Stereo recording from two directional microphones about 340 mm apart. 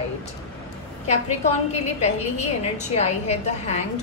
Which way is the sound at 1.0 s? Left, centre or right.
Centre.